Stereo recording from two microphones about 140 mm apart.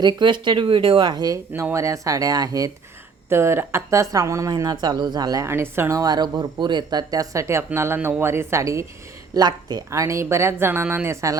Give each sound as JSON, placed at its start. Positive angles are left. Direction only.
{"t": 0.0, "sound": "speech", "side_deg": -35}